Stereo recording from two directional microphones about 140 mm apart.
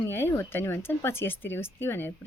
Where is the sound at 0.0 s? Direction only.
15° left (ahead or behind).